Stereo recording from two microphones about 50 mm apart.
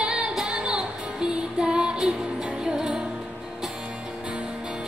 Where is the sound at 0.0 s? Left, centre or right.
Centre.